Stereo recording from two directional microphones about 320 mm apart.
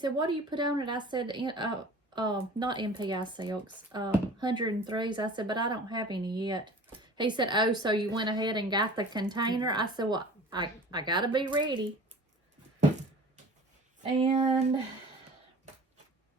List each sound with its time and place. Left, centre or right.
0.0 s speech: centre
14.0 s speech: centre